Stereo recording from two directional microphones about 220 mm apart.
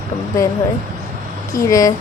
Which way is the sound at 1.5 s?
15° left (ahead or behind).